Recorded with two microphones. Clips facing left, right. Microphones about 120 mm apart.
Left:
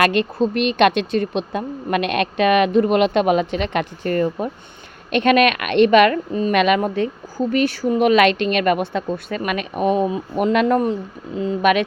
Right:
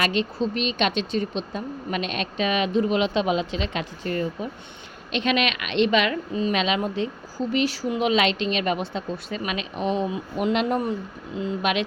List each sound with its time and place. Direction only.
0.0 s speech: 55° left (ahead or behind)